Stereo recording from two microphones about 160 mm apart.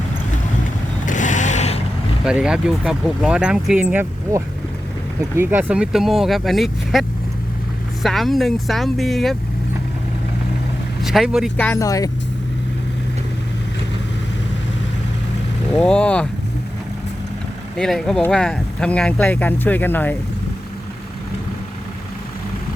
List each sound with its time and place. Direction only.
1.0 s a sound: 50° left (ahead or behind)
2.2 s speech: 5° right (ahead or behind)
8.0 s speech: centre (ahead or behind)
11.0 s speech: centre (ahead or behind)
11.5 s speech: 10° left (ahead or behind)
15.7 s speech: 5° left (ahead or behind)
17.7 s speech: 5° left (ahead or behind)